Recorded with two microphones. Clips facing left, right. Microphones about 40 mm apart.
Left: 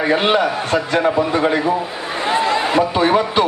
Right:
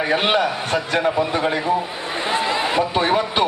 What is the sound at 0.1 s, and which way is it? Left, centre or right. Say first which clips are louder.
Speech: left 3 dB; centre.